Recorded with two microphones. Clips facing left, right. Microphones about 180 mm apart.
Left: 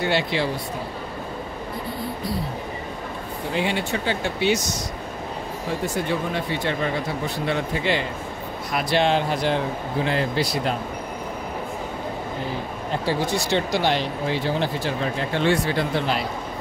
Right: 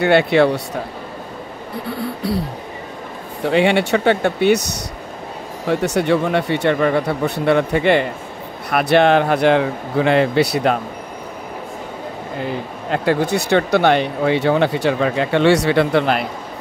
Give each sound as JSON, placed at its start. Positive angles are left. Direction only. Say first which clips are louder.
{"t": 0.0, "sound": "speech", "louder": "right 10 dB", "side_deg": -65}
{"t": 1.9, "sound": "speech", "louder": "right 8 dB", "side_deg": -70}
{"t": 3.4, "sound": "speech", "louder": "right 10 dB", "side_deg": -75}
{"t": 5.7, "sound": "speech", "louder": "right 9 dB", "side_deg": -70}
{"t": 12.9, "sound": "speech", "louder": "right 7 dB", "side_deg": -60}